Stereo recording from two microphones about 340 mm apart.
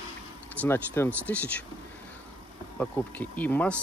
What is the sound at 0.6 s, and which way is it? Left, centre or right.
Speech, centre.